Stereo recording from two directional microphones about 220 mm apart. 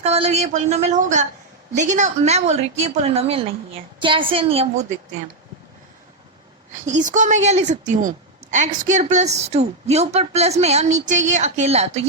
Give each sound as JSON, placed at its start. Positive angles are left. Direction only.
{"t": 0.0, "sound": "a woman's voice", "side_deg": -30}
{"t": 6.7, "sound": "a woman's voice", "side_deg": -35}